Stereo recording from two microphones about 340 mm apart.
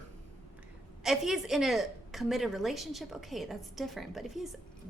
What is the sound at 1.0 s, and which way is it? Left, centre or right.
A woman's voice, centre.